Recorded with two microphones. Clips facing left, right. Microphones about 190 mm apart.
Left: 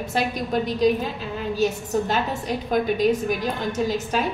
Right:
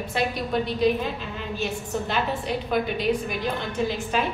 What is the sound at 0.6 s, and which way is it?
A woman's voice, 45° left (ahead or behind).